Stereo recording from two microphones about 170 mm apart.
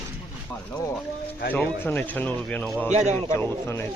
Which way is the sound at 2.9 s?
40° right (ahead or behind).